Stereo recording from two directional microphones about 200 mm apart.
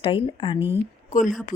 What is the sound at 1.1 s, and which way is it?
Speech, 40° left (ahead or behind).